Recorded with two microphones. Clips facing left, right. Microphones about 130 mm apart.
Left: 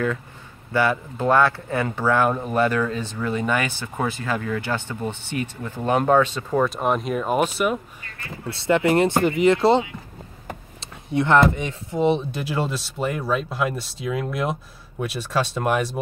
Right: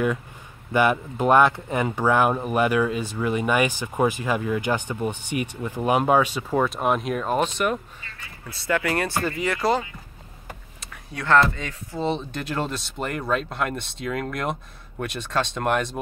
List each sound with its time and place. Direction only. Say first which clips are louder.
0.7 s speech: right 1 dB; 15° right (ahead or behind); by 7.8 s 5° left (ahead or behind)
8.6 s speech: left 6 dB; 25° left (ahead or behind); by 16.0 s 5° left (ahead or behind)